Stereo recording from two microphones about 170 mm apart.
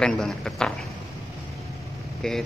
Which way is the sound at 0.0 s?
5° left (ahead or behind).